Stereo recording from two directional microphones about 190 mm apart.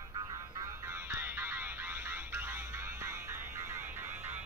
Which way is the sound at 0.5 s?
15° right (ahead or behind).